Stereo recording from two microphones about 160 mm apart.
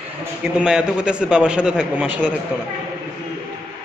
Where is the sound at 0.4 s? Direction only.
5° right (ahead or behind).